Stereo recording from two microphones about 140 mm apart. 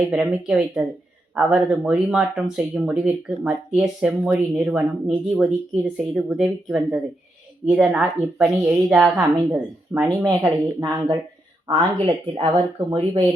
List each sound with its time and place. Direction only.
0.1 s a woman's voice: 10° right (ahead or behind)
10.2 s speech: 25° right (ahead or behind)
11.7 s speech: 35° right (ahead or behind)